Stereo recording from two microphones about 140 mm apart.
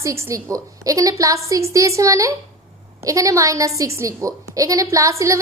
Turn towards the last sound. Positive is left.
turn(degrees=-20)  # may be behind; listen again after turning